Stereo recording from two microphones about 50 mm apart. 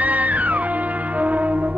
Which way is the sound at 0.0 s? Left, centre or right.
Right.